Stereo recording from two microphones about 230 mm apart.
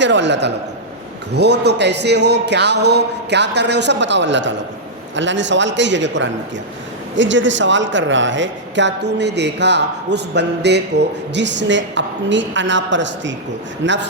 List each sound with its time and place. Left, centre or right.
0.0 s a man's voice: right